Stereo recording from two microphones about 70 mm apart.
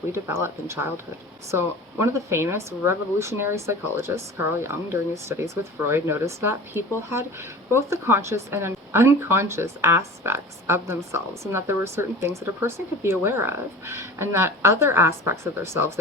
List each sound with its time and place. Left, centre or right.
0.1 s speech: right